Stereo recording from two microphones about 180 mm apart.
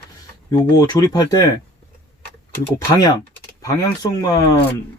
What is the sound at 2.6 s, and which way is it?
Speech, 20° left (ahead or behind).